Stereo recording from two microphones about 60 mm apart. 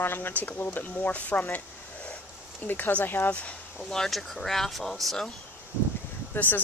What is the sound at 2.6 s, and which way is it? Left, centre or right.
Speech, left.